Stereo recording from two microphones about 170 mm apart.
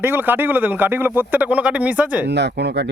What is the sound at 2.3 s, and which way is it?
Speech, 85° right.